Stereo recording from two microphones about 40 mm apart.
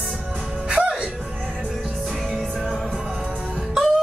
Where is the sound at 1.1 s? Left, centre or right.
Centre.